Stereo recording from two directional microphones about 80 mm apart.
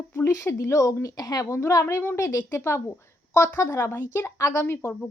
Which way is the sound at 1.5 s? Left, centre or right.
Left.